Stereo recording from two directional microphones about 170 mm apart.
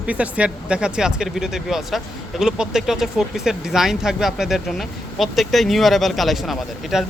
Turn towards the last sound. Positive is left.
turn(degrees=0)  # may be behind; listen again after turning